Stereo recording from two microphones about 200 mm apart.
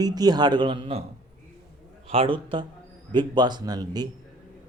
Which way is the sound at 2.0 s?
25° right (ahead or behind).